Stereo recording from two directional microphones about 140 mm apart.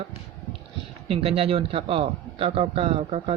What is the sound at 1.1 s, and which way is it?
Speech, 40° right (ahead or behind).